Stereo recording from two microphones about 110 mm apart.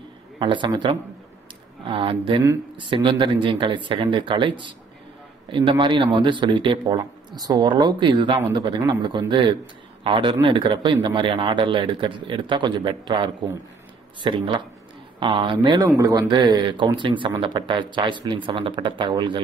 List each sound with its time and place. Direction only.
0.4 s a man's voice: 45° right (ahead or behind)
16.0 s a man's voice: 35° right (ahead or behind)